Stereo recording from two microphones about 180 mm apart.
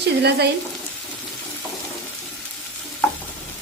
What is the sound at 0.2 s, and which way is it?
Speech, 65° right (ahead or behind).